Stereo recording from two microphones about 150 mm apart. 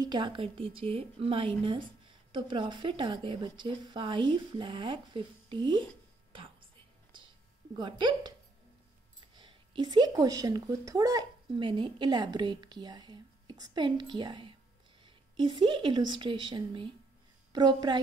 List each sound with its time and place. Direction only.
0.0 s a woman's voice: 30° right (ahead or behind)
7.7 s speech: 30° right (ahead or behind)
9.3 s a woman's voice: 30° right (ahead or behind)